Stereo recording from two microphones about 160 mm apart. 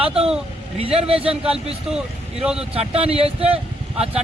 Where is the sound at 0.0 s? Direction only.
40° right (ahead or behind).